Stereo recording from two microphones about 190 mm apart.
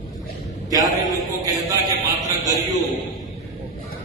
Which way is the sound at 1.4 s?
20° right (ahead or behind).